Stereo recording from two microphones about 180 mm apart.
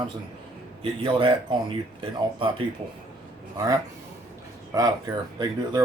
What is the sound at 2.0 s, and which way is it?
Speech, 30° right (ahead or behind).